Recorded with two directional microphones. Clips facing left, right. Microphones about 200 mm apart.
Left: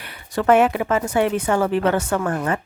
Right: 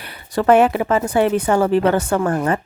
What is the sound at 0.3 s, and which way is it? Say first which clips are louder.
Speech: right 2 dB; 35° right (ahead or behind).